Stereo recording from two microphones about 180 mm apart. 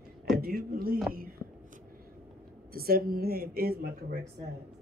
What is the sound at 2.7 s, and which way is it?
Speech, 55° right (ahead or behind).